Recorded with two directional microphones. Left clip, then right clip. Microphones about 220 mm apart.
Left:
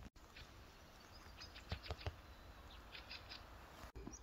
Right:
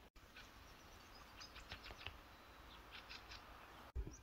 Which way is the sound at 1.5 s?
50° right (ahead or behind).